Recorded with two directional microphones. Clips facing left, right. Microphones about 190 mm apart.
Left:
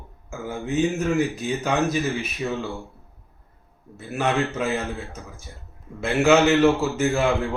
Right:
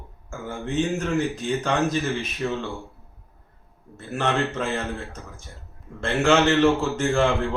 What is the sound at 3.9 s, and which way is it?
A man's voice, 5° left (ahead or behind).